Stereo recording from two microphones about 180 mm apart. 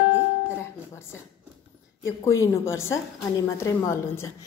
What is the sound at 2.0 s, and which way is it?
A woman's voice, 15° left (ahead or behind).